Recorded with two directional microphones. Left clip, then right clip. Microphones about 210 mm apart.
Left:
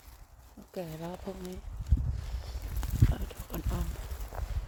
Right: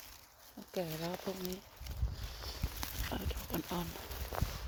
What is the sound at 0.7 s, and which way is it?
Speech, 10° right (ahead or behind).